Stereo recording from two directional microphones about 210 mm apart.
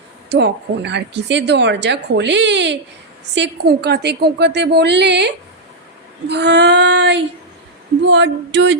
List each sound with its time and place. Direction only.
0.3 s a woman's voice: 55° right (ahead or behind)